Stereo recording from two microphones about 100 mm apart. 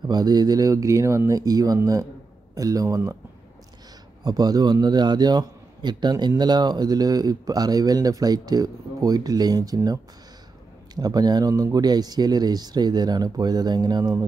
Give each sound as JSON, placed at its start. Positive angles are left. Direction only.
{"t": 0.1, "sound": "a man's voice", "side_deg": -40}
{"t": 4.2, "sound": "a man's voice", "side_deg": -40}
{"t": 11.0, "sound": "a man's voice", "side_deg": -40}